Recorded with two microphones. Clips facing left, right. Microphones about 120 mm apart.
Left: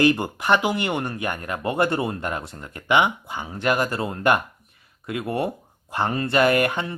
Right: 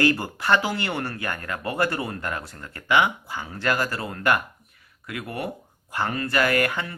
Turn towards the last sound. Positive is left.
turn(degrees=20)  # may be behind; listen again after turning